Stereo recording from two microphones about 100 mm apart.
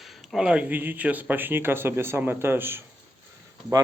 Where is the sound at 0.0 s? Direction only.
Centre (ahead or behind); by 2.8 s 25° right (ahead or behind).